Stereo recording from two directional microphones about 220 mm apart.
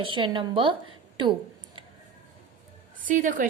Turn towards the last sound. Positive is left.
turn(degrees=-35)  # may be behind; listen again after turning